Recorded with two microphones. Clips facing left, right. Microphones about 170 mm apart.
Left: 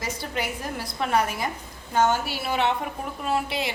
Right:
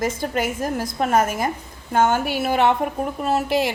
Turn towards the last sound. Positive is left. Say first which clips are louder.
# right 6 dB
turn(degrees=-50)  # may be behind; listen again after turning